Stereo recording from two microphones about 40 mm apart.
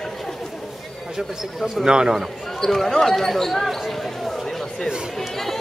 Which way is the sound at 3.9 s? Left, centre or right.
Centre.